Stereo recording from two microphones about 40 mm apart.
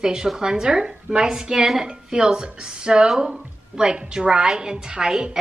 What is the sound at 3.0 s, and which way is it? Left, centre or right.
Speech, centre.